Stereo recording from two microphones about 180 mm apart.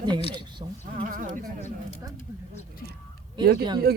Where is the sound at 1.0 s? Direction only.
50° right (ahead or behind).